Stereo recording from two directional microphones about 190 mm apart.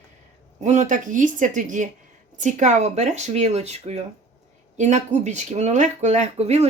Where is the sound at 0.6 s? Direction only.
40° right (ahead or behind).